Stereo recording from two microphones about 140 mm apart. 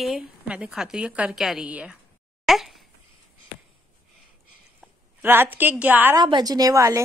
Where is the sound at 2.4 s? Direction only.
Centre (ahead or behind).